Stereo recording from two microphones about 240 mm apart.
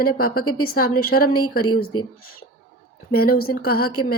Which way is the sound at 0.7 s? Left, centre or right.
Left.